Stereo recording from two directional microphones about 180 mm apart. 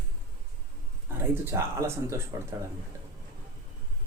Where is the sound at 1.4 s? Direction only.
15° right (ahead or behind).